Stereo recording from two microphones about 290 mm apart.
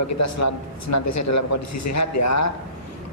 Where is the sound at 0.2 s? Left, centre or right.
Left.